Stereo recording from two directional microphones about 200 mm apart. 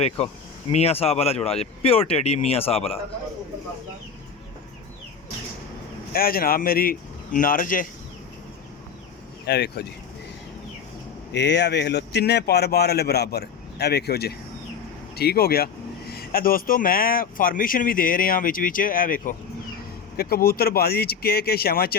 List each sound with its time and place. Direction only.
0.2 s speech: 30° left (ahead or behind)
6.1 s speech: 45° left (ahead or behind)
9.5 s speech: 55° left (ahead or behind)
11.3 s speech: 60° left (ahead or behind)